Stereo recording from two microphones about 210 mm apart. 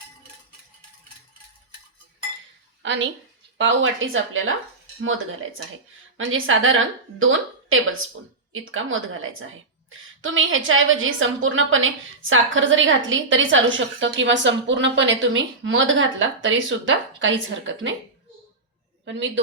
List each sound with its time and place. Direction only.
2.8 s a woman's voice: 60° right (ahead or behind)
6.1 s a woman's voice: 70° right (ahead or behind)